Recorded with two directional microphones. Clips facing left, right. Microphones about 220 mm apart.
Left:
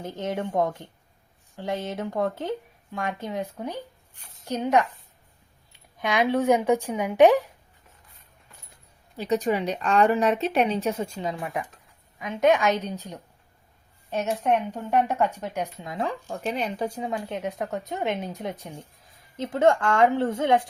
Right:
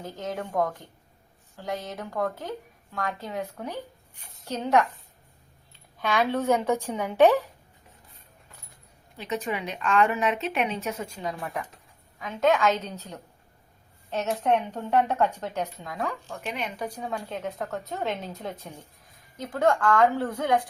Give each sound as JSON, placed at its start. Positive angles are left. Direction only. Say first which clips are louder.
{"t": 0.0, "sound": "speech", "louder": "left 4 dB", "side_deg": 25}
{"t": 9.1, "sound": "speech", "louder": "left 6 dB", "side_deg": 35}
{"t": 16.3, "sound": "speech", "louder": "left 5 dB", "side_deg": 35}